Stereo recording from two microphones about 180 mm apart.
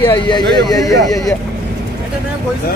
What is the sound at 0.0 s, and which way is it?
Speech, 25° left (ahead or behind).